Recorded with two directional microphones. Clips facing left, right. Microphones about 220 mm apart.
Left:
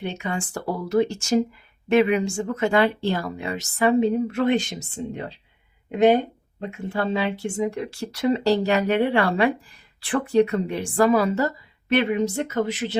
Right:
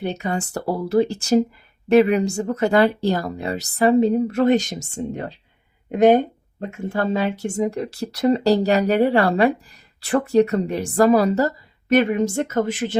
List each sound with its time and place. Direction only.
0.0 s speech: 40° right (ahead or behind)